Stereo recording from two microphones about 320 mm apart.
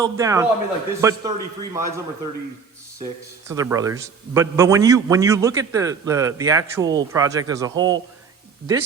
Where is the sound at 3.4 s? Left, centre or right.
Centre.